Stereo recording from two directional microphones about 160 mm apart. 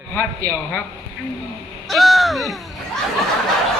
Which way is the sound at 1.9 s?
Centre (ahead or behind).